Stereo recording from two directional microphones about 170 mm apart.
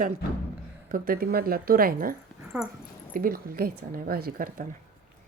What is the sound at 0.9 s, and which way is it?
A woman's voice, 60° right (ahead or behind).